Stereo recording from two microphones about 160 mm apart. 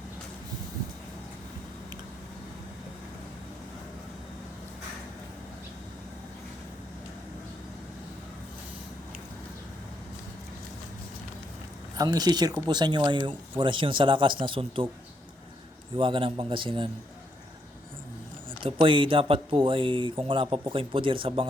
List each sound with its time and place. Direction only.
11.9 s speech: 25° right (ahead or behind)
16.0 s speech: 30° right (ahead or behind)
18.6 s speech: 30° right (ahead or behind)